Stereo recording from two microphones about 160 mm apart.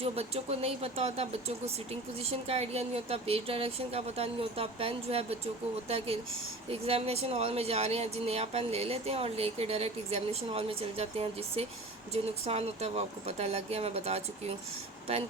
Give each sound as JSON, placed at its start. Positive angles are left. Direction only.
{"t": 0.0, "sound": "speech", "side_deg": -40}
{"t": 6.7, "sound": "speech", "side_deg": -40}